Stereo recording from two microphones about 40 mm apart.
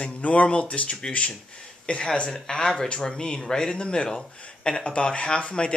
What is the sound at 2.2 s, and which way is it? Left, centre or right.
Speech, centre.